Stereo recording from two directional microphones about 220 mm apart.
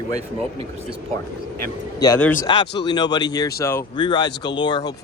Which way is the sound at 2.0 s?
10° left (ahead or behind).